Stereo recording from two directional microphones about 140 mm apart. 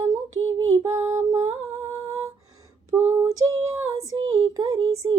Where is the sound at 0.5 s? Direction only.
20° right (ahead or behind).